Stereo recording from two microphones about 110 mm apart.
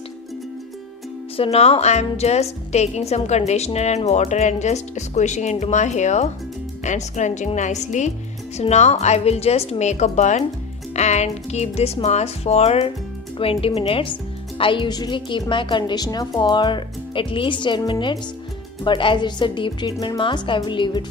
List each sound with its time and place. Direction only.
1.3 s a woman's voice: 60° left (ahead or behind)
13.4 s speech: 60° left (ahead or behind)